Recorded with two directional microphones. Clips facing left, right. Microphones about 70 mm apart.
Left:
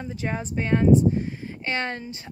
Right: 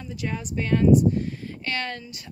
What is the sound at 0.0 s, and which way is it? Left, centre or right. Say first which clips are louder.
Speech: left 2 dB; left.